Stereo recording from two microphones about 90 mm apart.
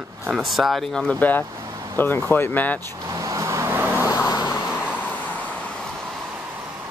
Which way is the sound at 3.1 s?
35° right (ahead or behind).